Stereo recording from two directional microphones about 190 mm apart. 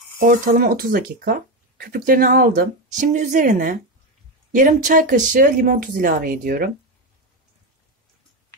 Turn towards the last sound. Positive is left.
turn(degrees=-50)  # may be behind; listen again after turning